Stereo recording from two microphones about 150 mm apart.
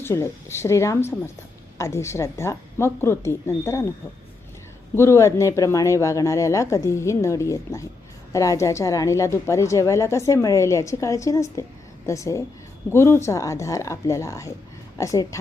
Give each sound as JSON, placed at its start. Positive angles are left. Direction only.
{"t": 0.0, "sound": "a woman's voice", "side_deg": 15}
{"t": 4.9, "sound": "a woman's voice", "side_deg": 20}